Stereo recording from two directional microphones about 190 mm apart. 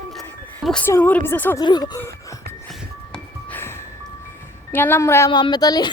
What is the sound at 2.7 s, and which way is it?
Music, 5° left (ahead or behind).